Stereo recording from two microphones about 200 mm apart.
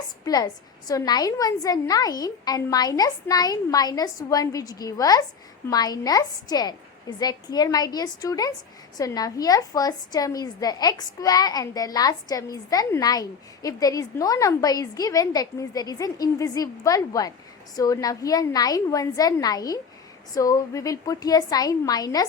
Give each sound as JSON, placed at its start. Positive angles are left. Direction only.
{"t": 0.3, "sound": "a woman's voice", "side_deg": 20}